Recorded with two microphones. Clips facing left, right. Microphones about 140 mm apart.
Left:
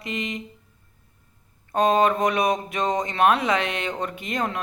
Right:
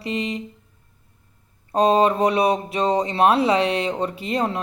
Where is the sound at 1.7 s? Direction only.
30° right (ahead or behind).